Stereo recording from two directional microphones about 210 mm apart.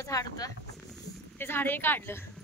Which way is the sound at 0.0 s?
15° left (ahead or behind).